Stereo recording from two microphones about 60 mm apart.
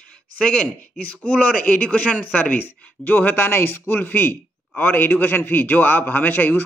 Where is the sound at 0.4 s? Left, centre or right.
Centre.